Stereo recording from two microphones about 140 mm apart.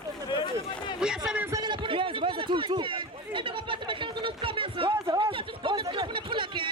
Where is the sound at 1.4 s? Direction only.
30° right (ahead or behind).